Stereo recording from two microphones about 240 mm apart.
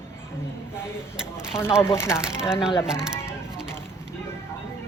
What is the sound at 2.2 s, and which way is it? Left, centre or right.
Speech, centre.